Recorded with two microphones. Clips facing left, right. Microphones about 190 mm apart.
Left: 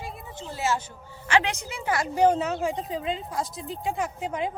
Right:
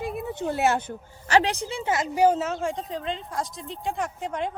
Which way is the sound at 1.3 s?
35° right (ahead or behind).